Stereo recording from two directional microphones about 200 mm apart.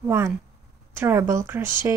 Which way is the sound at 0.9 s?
10° right (ahead or behind).